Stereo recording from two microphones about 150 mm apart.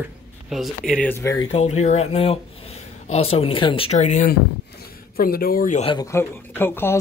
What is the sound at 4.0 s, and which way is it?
Speech, 55° left (ahead or behind).